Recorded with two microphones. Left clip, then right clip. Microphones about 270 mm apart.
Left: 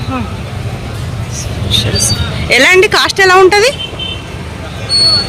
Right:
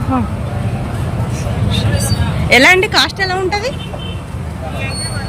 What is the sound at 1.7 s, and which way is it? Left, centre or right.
Speech, centre.